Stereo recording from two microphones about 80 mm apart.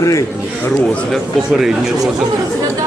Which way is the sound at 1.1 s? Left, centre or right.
Centre.